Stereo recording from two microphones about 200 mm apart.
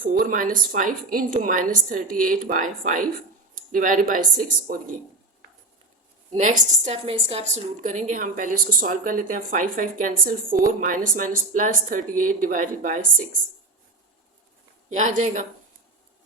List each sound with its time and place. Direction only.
0.0 s a woman's voice: 45° right (ahead or behind)
6.3 s a woman's voice: 40° right (ahead or behind)
14.8 s a woman's voice: 35° right (ahead or behind)